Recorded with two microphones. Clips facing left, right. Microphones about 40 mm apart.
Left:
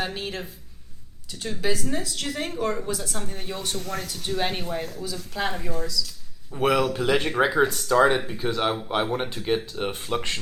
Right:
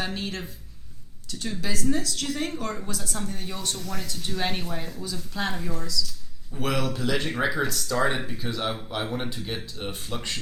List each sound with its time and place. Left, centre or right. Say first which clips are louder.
0.0 s a woman's voice: left 1 dB; centre
3.8 s speech: left 4 dB; left
4.2 s speech: left 2 dB; centre
4.8 s speech: left 3 dB; left
5.3 s speech: left 2 dB; left
5.6 s a woman's voice: left 2 dB; centre
6.5 s speech: left 6 dB; left
8.3 s a woman's voice: left 5 dB; centre